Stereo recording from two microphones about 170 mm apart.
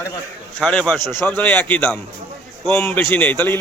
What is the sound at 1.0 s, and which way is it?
Speech, 25° right (ahead or behind).